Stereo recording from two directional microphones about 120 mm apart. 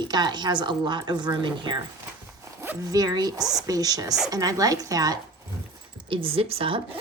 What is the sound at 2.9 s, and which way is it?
Speech, 35° right (ahead or behind).